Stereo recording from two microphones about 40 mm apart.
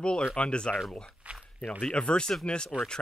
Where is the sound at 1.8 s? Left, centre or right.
Left.